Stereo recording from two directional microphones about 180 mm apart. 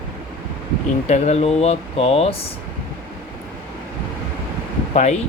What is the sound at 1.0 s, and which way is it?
Speech, 40° left (ahead or behind).